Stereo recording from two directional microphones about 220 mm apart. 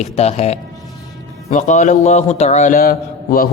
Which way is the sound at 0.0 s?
30° left (ahead or behind).